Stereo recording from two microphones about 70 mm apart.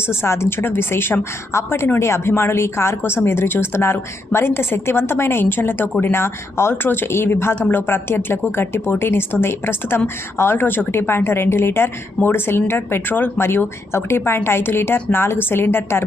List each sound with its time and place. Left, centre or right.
0.2 s a woman's voice: left